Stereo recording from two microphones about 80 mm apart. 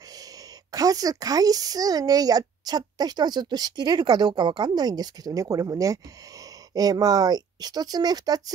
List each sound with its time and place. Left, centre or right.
0.7 s speech: right